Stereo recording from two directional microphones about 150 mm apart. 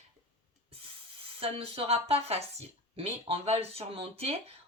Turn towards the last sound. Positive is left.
turn(degrees=-40)  # may be behind; listen again after turning